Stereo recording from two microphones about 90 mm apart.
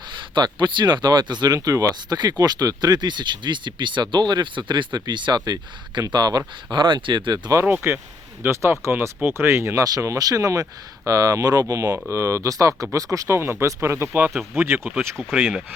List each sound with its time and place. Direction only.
0.3 s speech: 55° right (ahead or behind)
7.6 s speech: 20° right (ahead or behind)
15.2 s speech: 10° right (ahead or behind)